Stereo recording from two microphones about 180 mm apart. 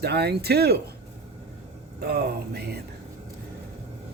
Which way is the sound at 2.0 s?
65° right (ahead or behind).